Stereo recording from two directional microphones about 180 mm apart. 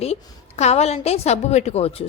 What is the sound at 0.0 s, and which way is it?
A woman's voice, 35° left (ahead or behind).